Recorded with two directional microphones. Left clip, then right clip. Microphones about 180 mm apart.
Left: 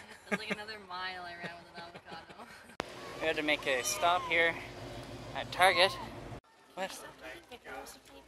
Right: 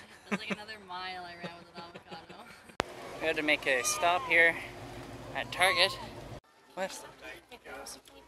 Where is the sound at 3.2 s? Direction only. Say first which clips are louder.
Right 2 dB; 15° right (ahead or behind).